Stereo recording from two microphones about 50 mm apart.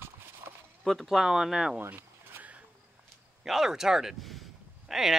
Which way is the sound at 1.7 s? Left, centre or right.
Right.